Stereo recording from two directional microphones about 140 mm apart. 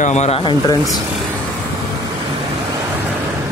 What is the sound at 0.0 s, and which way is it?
Speech, 55° left (ahead or behind).